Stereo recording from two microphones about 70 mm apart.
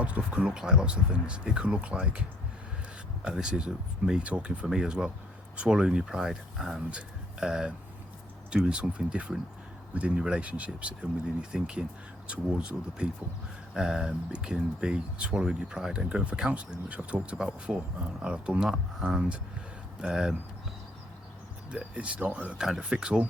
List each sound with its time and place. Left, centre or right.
0.0 s speech: centre
3.2 s speech: centre
21.7 s speech: centre